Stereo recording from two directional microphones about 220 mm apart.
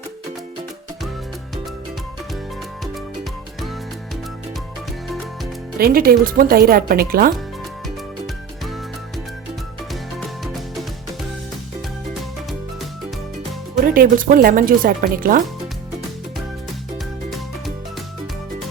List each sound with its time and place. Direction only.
5.8 s speech: 40° right (ahead or behind)
9.9 s music: centre (ahead or behind)
13.8 s speech: 40° right (ahead or behind)